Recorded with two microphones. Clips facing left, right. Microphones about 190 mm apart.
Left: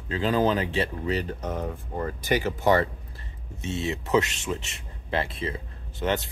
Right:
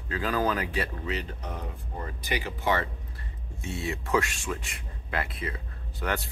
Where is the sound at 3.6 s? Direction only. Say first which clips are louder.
Left 4 dB; 20° left (ahead or behind).